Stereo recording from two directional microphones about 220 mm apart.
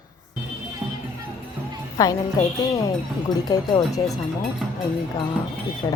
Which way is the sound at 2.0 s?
15° left (ahead or behind).